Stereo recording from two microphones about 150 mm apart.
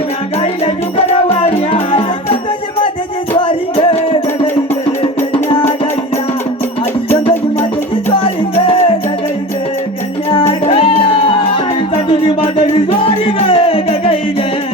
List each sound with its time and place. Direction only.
0.6 s music: 40° left (ahead or behind)
3.3 s music: 35° left (ahead or behind)
8.1 s music: 35° left (ahead or behind)
10.7 s music: 40° left (ahead or behind)